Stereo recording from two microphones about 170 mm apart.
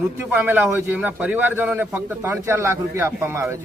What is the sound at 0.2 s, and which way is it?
Speech, 10° right (ahead or behind).